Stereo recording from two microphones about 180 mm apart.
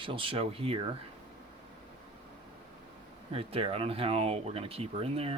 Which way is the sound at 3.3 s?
30° right (ahead or behind).